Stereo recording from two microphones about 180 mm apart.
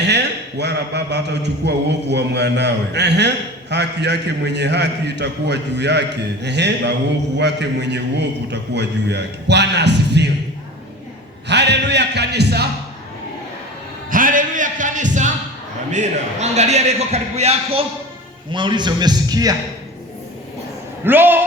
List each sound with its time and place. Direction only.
0.0 s a man's voice: 70° right (ahead or behind)
11.4 s a man's voice: 70° right (ahead or behind)
14.1 s music: 50° right (ahead or behind)
15.9 s a man's voice: 40° right (ahead or behind); by 19.5 s 20° right (ahead or behind)
21.0 s a man's voice: 10° right (ahead or behind)